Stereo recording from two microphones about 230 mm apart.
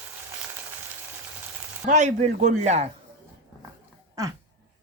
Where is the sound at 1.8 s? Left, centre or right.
Right.